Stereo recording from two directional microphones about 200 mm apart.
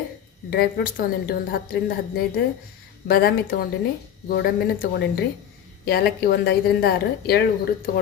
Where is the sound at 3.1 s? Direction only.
50° left (ahead or behind).